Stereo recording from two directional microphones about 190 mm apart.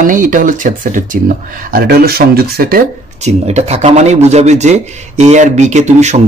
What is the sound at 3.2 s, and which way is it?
Speech, 35° right (ahead or behind).